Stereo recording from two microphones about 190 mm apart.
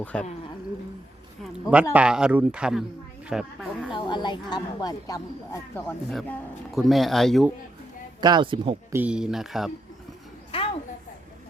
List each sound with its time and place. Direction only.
0.0 s speech: 5° left (ahead or behind)
1.7 s speech: 5° right (ahead or behind)
3.9 s speech: 25° left (ahead or behind)
6.1 s speech: 5° left (ahead or behind)
8.2 s speech: 25° right (ahead or behind)
8.9 s speech: 10° right (ahead or behind)
10.5 s a sound: 30° left (ahead or behind)